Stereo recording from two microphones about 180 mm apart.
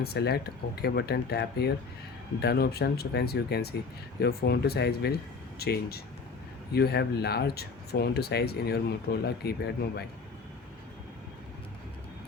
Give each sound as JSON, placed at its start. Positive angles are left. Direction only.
{"t": 0.0, "sound": "speech", "side_deg": 60}